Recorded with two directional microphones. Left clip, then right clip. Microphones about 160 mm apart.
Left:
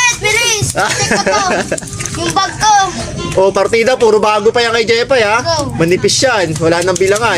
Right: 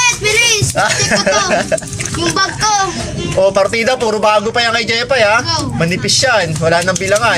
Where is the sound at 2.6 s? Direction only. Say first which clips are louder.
Left 6 dB; 15° left (ahead or behind).